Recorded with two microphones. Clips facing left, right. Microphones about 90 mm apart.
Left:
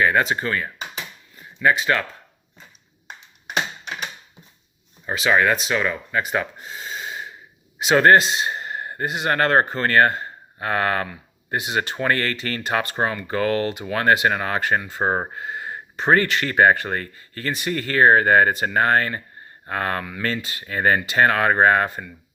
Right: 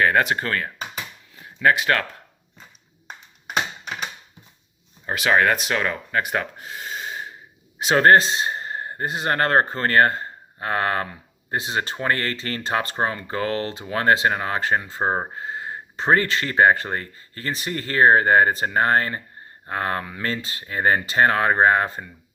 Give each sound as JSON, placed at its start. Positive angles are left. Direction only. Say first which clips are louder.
{"t": 0.0, "sound": "speech", "louder": "even", "side_deg": -55}
{"t": 5.0, "sound": "speech", "louder": "even", "side_deg": -55}
{"t": 15.4, "sound": "a sound", "louder": "even", "side_deg": -25}
{"t": 16.1, "sound": "speech", "louder": "left 1 dB", "side_deg": -30}